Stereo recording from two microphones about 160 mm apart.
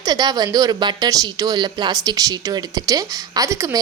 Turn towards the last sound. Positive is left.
turn(degrees=-20)  # may be behind; listen again after turning